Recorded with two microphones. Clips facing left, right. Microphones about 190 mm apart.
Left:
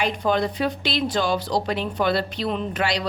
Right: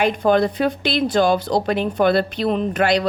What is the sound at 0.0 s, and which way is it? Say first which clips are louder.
A woman's voice: right 6 dB; 55° right (ahead or behind).